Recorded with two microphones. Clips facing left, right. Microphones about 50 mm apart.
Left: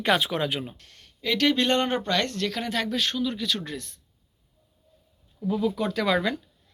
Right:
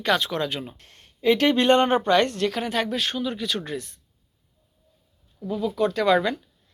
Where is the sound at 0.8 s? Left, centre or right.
Right; by 3.9 s centre.